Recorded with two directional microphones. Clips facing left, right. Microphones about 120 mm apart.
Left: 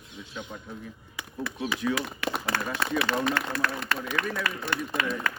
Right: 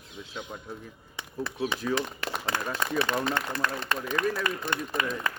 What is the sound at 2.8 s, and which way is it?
A man's voice, 20° right (ahead or behind).